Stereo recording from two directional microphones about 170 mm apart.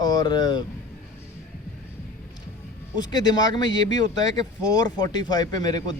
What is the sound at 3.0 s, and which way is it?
Speech, 25° left (ahead or behind).